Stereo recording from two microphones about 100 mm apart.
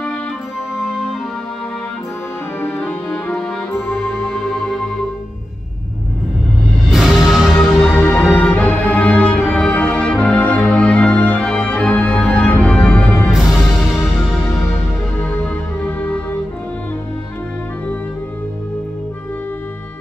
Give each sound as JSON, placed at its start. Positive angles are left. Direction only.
{"t": 2.6, "sound": "music", "side_deg": 15}
{"t": 6.9, "sound": "music", "side_deg": 0}
{"t": 7.5, "sound": "music", "side_deg": 15}
{"t": 13.3, "sound": "music", "side_deg": -5}
{"t": 15.1, "sound": "music", "side_deg": 15}